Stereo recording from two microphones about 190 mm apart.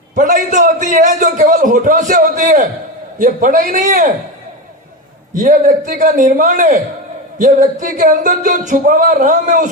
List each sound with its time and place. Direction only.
0.2 s a man's voice: 45° right (ahead or behind)
5.3 s a man's voice: 45° right (ahead or behind)